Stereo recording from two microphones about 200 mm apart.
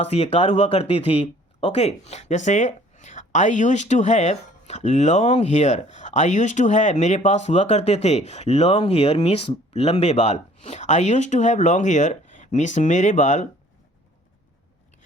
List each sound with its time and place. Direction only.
0.0 s speech: 30° left (ahead or behind)